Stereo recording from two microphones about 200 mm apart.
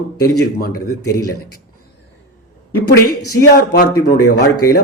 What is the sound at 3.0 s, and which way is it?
Speech, 50° left (ahead or behind).